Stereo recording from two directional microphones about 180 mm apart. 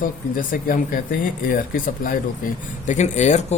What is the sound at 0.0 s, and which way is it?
Speech, 50° left (ahead or behind).